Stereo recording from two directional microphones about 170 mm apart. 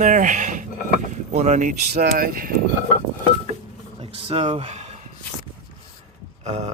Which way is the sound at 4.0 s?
35° right (ahead or behind).